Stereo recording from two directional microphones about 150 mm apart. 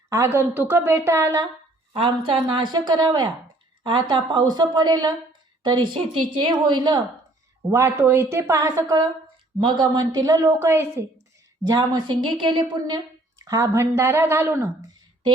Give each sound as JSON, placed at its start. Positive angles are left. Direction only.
{"t": 0.1, "sound": "speech", "side_deg": -20}
{"t": 2.5, "sound": "a woman's voice", "side_deg": -30}
{"t": 7.7, "sound": "a woman's voice", "side_deg": -20}